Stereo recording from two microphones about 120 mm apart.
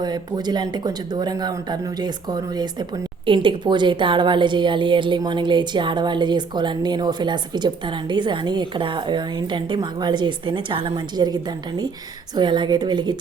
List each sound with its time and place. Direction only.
0.0 s a woman's voice: 35° right (ahead or behind)
12.4 s a woman's voice: 40° right (ahead or behind)